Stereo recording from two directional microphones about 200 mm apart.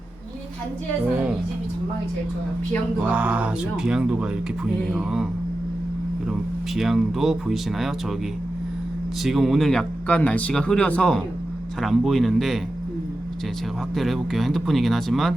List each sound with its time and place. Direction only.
3.0 s speech: 5° right (ahead or behind)
6.7 s speech: centre (ahead or behind)
9.2 s speech: centre (ahead or behind)
13.9 s speech: centre (ahead or behind)